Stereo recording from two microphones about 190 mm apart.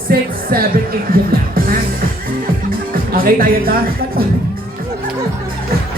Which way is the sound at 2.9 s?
50° right (ahead or behind).